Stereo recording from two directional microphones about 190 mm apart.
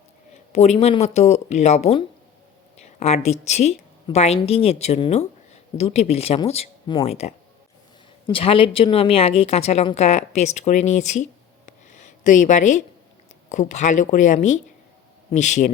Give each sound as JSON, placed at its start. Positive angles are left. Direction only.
{"t": 0.5, "sound": "a woman's voice", "side_deg": 35}